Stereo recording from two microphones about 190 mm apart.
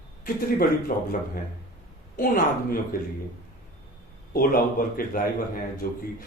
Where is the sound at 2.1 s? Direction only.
45° left (ahead or behind).